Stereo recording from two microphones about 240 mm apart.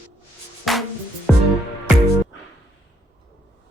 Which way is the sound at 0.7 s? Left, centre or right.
Centre.